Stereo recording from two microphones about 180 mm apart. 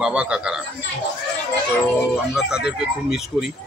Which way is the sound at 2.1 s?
5° right (ahead or behind).